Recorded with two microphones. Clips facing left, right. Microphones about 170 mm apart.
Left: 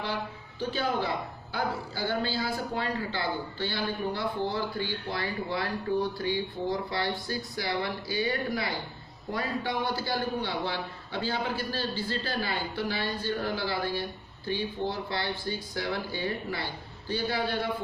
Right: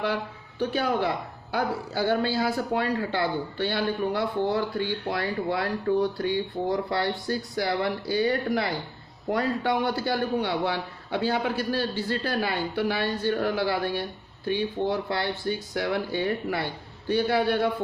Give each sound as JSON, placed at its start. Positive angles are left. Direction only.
{"t": 0.6, "sound": "a man's voice", "side_deg": -70}